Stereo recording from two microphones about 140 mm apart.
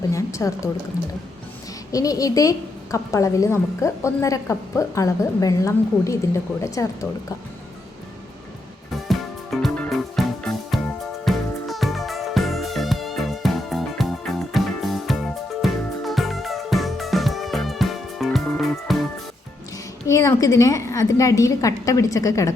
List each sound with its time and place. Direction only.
0.1 s a woman's voice: 20° left (ahead or behind)
1.9 s a woman's voice: 25° left (ahead or behind)
9.0 s music: centre (ahead or behind)
20.1 s a woman's voice: 20° left (ahead or behind)